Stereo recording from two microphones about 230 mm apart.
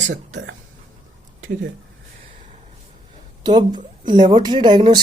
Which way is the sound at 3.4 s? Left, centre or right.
Centre.